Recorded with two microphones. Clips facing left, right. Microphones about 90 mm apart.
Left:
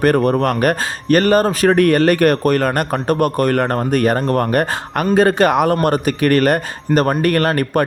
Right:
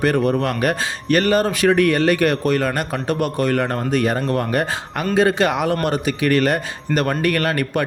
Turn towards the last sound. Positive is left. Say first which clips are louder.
# left 4 dB
turn(degrees=40)  # may be behind; listen again after turning